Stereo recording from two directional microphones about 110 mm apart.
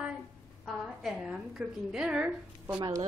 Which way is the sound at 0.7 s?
Centre (ahead or behind).